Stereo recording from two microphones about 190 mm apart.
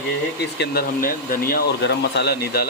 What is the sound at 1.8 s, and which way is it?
Speech, 65° left (ahead or behind).